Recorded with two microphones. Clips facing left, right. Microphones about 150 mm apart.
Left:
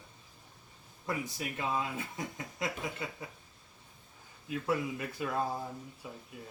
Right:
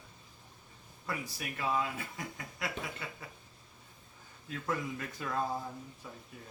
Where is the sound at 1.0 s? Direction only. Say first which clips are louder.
Left 3 dB; 25° left (ahead or behind).